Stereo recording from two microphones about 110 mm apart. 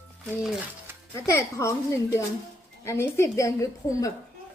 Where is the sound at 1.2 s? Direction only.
25° left (ahead or behind).